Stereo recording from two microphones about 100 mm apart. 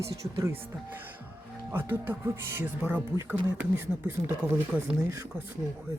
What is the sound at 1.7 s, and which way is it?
Speech, 20° right (ahead or behind).